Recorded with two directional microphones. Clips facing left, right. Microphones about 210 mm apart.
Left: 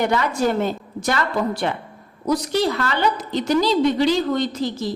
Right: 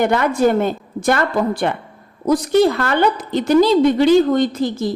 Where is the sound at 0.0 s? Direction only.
55° right (ahead or behind).